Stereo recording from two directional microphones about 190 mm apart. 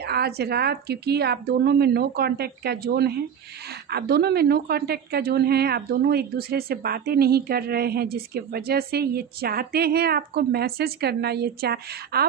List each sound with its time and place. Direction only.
0.0 s a woman's voice: 55° right (ahead or behind)